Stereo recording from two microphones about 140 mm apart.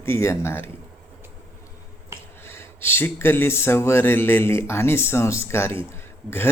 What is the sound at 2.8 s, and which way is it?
Speech, 15° left (ahead or behind).